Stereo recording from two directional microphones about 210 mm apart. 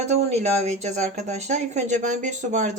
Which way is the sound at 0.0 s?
30° right (ahead or behind).